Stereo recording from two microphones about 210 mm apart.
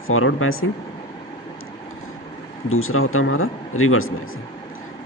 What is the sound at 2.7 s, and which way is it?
Speech, 80° left.